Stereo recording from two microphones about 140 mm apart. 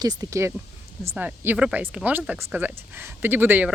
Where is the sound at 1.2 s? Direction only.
10° right (ahead or behind).